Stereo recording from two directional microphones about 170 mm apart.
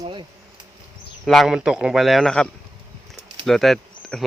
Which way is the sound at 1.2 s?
Centre (ahead or behind).